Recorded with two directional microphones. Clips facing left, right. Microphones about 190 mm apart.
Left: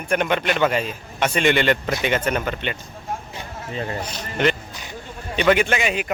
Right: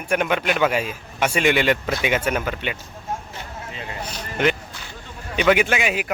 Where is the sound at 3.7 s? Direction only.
40° left (ahead or behind).